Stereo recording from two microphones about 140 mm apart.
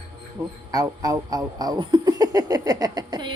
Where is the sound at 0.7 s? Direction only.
25° right (ahead or behind).